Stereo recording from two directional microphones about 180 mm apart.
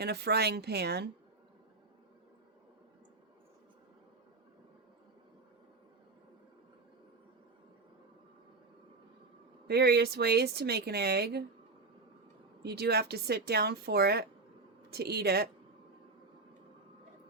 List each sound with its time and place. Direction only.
0.0 s speech: 65° right (ahead or behind)
9.6 s speech: 65° right (ahead or behind)
12.6 s speech: 60° right (ahead or behind)